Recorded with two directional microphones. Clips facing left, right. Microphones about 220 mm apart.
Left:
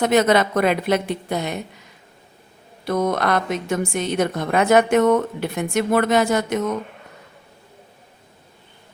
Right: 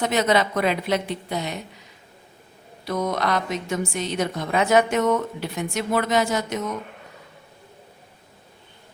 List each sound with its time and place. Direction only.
0.0 s a woman's voice: 50° left (ahead or behind)
2.8 s a woman's voice: 50° left (ahead or behind)